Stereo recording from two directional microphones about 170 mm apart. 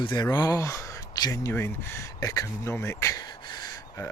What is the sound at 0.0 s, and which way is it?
Speech, 25° left (ahead or behind).